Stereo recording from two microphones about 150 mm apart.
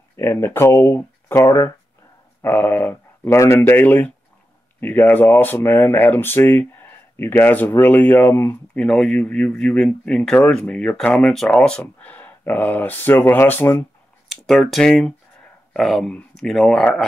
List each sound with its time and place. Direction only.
0.1 s speech: 15° left (ahead or behind)
8.7 s speech: 5° left (ahead or behind)
14.3 s speech: centre (ahead or behind)